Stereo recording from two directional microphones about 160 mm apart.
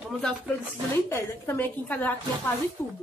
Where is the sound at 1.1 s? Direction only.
15° left (ahead or behind).